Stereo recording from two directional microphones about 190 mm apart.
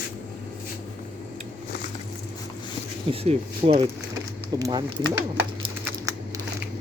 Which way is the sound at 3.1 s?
35° right (ahead or behind).